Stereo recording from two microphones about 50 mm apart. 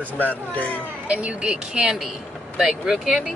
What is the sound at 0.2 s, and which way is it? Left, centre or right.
Speech, left.